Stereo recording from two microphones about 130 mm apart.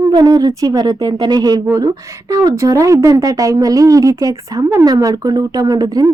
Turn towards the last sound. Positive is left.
turn(degrees=-30)  # may be behind; listen again after turning